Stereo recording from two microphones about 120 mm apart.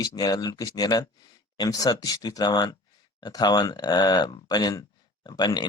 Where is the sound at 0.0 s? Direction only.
30° left (ahead or behind).